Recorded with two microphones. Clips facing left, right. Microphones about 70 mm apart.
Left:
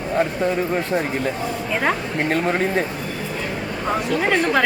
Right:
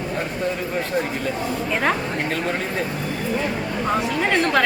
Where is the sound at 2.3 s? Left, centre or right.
Left.